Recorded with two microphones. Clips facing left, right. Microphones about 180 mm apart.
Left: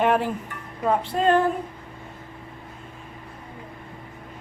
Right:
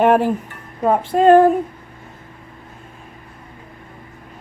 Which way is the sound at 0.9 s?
45° right (ahead or behind).